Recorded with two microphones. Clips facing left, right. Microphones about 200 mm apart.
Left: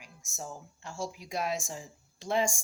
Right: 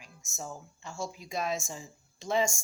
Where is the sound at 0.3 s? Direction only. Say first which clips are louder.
Right 1 dB; 10° left (ahead or behind).